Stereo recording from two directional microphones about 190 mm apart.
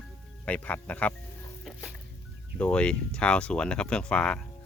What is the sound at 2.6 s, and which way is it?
Speech, 5° left (ahead or behind).